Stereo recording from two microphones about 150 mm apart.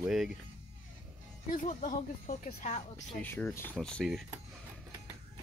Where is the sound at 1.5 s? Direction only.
60° left (ahead or behind).